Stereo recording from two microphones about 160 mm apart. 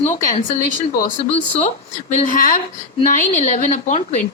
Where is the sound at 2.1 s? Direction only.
55° left (ahead or behind).